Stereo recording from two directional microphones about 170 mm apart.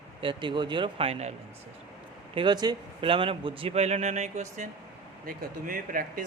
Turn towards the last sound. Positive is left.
turn(degrees=-55)  # may be behind; listen again after turning